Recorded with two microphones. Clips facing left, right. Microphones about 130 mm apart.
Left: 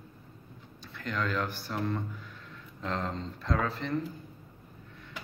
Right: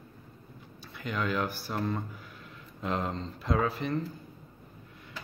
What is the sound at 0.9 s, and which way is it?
Speech, 10° right (ahead or behind).